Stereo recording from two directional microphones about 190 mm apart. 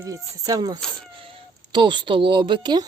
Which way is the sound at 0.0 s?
15° right (ahead or behind).